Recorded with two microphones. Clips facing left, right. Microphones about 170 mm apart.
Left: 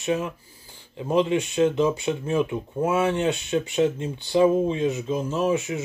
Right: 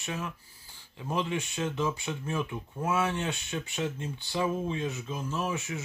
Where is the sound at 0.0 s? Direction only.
20° left (ahead or behind).